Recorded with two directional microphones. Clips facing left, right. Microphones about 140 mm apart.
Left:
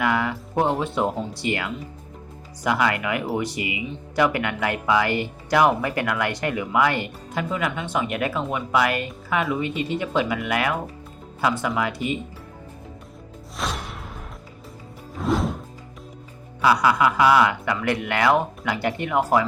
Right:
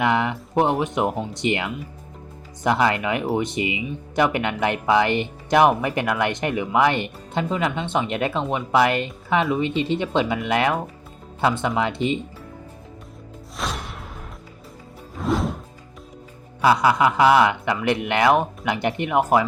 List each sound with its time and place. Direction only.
0.0 s speech: 20° right (ahead or behind)
13.6 s music: centre (ahead or behind)
16.6 s speech: 25° right (ahead or behind)